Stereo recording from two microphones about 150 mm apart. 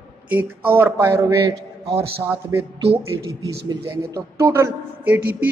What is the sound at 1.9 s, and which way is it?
Speech, 40° right (ahead or behind).